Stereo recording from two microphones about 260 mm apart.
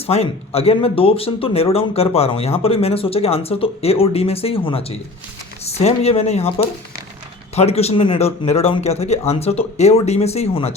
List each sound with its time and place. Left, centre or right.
0.0 s speech: left
7.5 s speech: left